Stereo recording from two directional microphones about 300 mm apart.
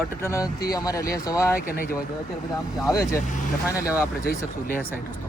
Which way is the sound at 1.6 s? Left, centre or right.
Left.